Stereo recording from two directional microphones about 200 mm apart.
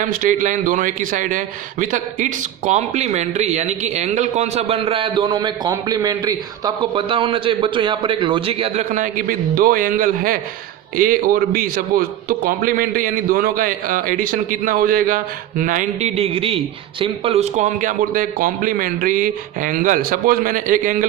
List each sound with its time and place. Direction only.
0.0 s a man's voice: 40° right (ahead or behind)